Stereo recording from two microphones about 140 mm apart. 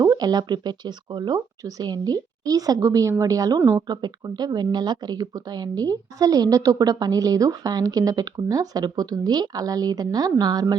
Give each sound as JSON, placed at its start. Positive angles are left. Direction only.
{"t": 0.0, "sound": "speech", "side_deg": -30}